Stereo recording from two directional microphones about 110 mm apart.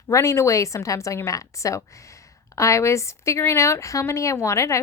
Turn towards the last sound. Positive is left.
turn(degrees=25)  # may be behind; listen again after turning